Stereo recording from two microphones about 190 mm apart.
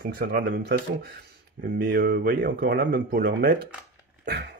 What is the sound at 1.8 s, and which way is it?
Speech, 50° right (ahead or behind).